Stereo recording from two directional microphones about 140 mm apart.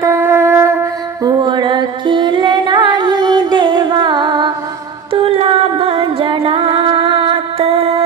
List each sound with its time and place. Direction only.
0.0 s shofar: 20° right (ahead or behind)
1.2 s music: 35° right (ahead or behind)